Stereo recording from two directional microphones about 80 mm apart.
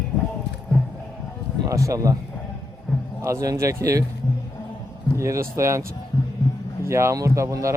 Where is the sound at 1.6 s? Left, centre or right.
Right.